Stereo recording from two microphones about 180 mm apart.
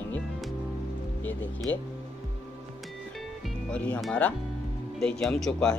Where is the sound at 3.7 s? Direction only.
5° left (ahead or behind).